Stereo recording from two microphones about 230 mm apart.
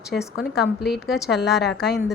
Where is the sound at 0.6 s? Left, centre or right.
Left.